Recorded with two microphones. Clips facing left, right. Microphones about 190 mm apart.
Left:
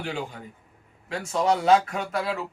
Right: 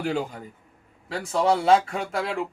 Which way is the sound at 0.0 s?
40° right (ahead or behind).